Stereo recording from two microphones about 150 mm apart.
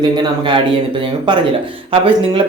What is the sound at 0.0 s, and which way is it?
Speech, 30° right (ahead or behind).